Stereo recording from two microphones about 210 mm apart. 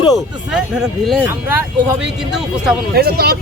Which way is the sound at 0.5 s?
5° right (ahead or behind).